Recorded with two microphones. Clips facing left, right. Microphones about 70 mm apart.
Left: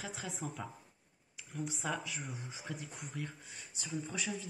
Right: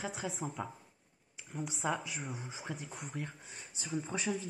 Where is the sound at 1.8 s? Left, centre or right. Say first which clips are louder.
Right 6 dB; right.